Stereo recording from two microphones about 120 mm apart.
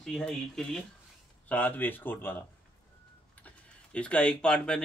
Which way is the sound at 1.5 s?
15° left (ahead or behind).